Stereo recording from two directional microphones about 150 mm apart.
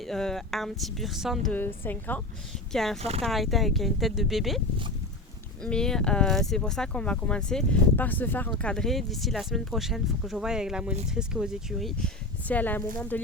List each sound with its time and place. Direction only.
0.0 s speech: 5° left (ahead or behind)
1.5 s a woman's voice: 15° left (ahead or behind)
3.0 s speech: 45° right (ahead or behind)
3.2 s speech: centre (ahead or behind)
5.6 s a woman's voice: 5° left (ahead or behind)